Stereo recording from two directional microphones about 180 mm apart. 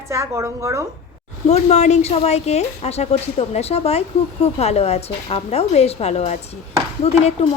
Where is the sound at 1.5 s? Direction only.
35° left (ahead or behind).